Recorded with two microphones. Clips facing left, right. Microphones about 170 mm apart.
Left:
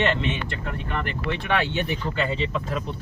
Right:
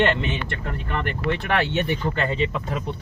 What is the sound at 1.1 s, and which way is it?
Speech, 50° right (ahead or behind).